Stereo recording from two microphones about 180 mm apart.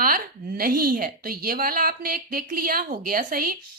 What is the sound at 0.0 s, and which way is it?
Speech, 55° right (ahead or behind).